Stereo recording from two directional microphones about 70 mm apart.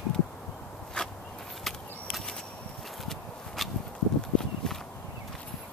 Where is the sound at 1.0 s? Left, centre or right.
Centre.